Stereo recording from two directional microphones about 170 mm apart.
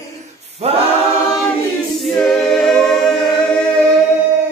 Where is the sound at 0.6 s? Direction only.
35° right (ahead or behind).